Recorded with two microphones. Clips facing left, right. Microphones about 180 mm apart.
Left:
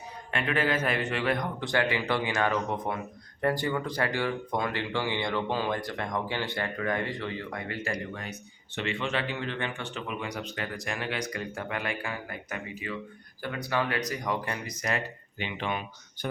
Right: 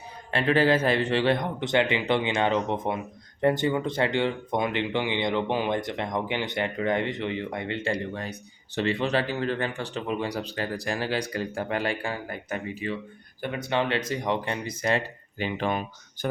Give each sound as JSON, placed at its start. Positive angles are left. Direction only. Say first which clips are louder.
{"t": 0.3, "sound": "speech", "louder": "right 6 dB", "side_deg": -30}